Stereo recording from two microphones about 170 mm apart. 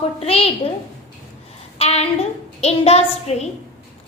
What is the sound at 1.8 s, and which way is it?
A child's voice, 35° left (ahead or behind).